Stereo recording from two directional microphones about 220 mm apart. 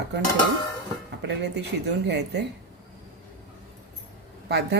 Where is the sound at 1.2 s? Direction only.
50° right (ahead or behind).